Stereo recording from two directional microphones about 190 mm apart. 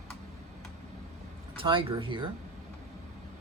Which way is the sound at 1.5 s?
25° right (ahead or behind).